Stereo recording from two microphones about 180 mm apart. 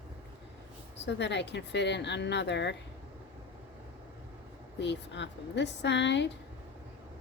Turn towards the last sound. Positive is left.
turn(degrees=75)  # may be behind; listen again after turning